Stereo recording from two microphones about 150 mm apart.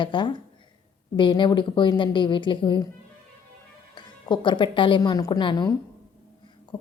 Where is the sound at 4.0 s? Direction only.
30° left (ahead or behind).